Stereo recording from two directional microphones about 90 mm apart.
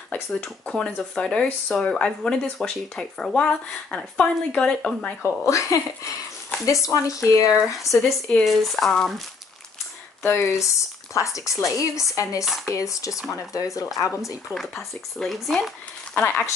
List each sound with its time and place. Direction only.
0.4 s speech: 10° left (ahead or behind)
5.2 s speech: 35° left (ahead or behind)
7.6 s speech: centre (ahead or behind)
10.2 s speech: 30° left (ahead or behind)
14.2 s speech: centre (ahead or behind)
16.2 s speech: 10° left (ahead or behind)